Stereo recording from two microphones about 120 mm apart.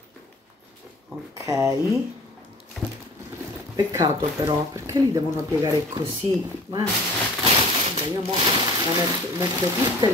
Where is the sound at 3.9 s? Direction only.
30° right (ahead or behind).